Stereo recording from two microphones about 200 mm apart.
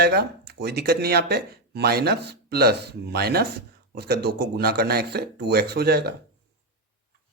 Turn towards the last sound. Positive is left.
turn(degrees=-50)  # may be behind; listen again after turning